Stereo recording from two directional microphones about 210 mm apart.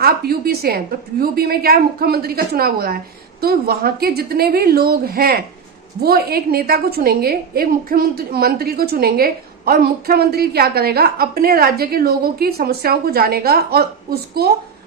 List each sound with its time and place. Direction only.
0.0 s a woman's voice: 45° right (ahead or behind)